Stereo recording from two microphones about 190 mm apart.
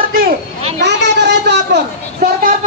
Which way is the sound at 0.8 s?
65° right (ahead or behind).